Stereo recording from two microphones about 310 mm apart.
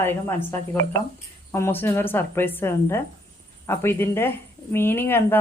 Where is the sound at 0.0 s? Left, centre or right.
Centre.